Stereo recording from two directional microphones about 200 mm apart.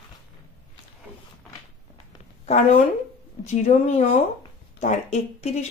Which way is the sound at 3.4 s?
35° left (ahead or behind).